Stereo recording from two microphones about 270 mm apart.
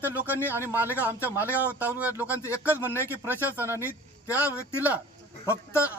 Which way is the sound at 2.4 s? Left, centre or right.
Centre.